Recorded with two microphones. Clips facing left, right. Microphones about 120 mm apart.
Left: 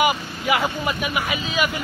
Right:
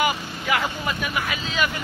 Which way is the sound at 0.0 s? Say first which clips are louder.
Left 3 dB; 15° left (ahead or behind).